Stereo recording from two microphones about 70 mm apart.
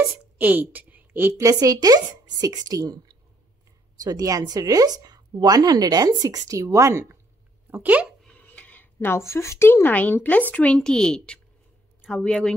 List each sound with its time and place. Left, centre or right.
0.4 s a woman's voice: right
1.4 s a woman's voice: right
7.7 s speech: right
8.3 s a sound: left
9.1 s a woman's voice: left; by 10.8 s centre
10.8 s a woman's voice: centre